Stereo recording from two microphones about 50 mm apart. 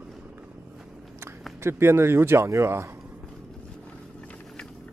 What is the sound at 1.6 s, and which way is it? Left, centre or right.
Speech, right.